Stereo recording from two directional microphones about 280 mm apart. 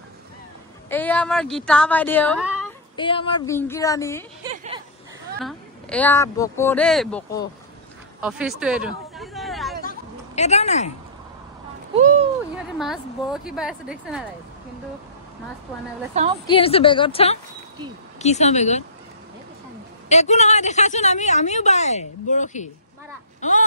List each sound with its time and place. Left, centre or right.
0.8 s a woman's voice: centre
3.0 s speech: centre
4.4 s a sound: centre
5.4 s speech: centre
8.2 s a sound: centre
9.8 s a sound: left
12.7 s a woman's voice: centre
16.4 s a woman's voice: centre
20.1 s a woman's voice: left